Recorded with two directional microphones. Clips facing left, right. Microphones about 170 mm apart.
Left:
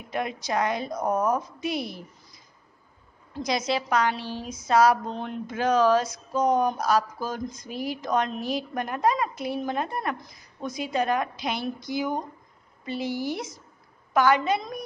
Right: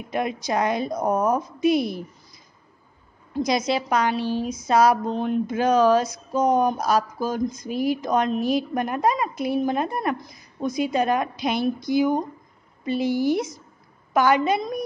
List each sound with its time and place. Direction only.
0.1 s speech: 15° right (ahead or behind)
3.3 s speech: 15° right (ahead or behind)